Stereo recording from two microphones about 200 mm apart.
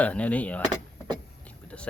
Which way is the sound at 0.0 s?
5° left (ahead or behind).